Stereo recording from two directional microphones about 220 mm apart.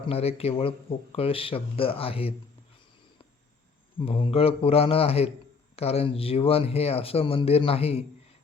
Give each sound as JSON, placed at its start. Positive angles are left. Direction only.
{"t": 0.1, "sound": "speech", "side_deg": 25}
{"t": 3.9, "sound": "speech", "side_deg": 25}